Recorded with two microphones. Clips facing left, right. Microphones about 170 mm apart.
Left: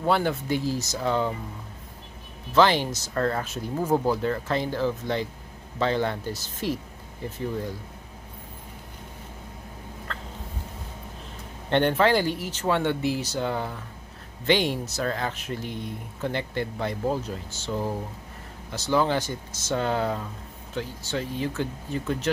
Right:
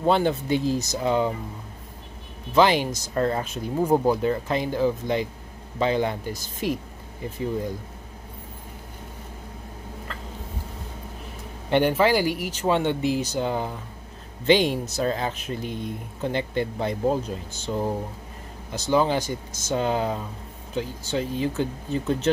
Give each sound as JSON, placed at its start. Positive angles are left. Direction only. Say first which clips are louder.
{"t": 0.0, "sound": "speech", "louder": "right 3 dB", "side_deg": -20}
{"t": 2.5, "sound": "speech", "louder": "right 1 dB", "side_deg": -15}
{"t": 10.1, "sound": "fowl", "louder": "left 3 dB", "side_deg": -5}
{"t": 11.7, "sound": "speech", "louder": "right 1 dB", "side_deg": -10}